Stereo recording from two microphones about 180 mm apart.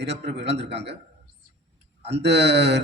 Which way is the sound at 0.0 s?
70° right (ahead or behind).